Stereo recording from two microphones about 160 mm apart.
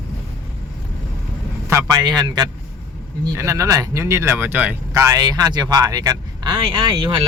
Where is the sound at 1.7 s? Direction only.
20° right (ahead or behind).